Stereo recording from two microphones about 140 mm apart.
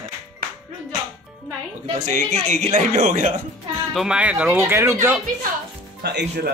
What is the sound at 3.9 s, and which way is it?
Speech, 5° right (ahead or behind).